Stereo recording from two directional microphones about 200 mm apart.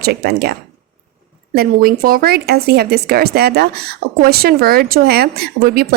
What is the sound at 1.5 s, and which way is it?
A woman's voice, 50° right (ahead or behind).